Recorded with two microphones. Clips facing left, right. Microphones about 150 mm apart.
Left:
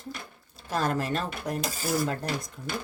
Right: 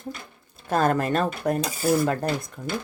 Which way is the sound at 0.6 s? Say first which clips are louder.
Right 6 dB; 55° right (ahead or behind).